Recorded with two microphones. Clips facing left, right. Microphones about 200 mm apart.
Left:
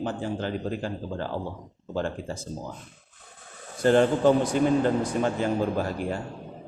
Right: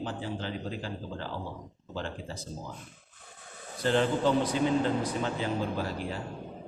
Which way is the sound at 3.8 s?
50° left (ahead or behind).